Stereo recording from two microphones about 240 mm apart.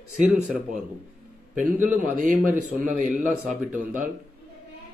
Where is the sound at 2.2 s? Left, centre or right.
Right.